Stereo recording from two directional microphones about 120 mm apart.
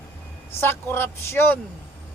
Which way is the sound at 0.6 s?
20° left (ahead or behind).